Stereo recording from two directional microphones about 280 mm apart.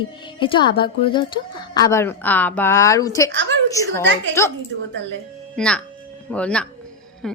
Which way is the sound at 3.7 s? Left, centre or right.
Centre.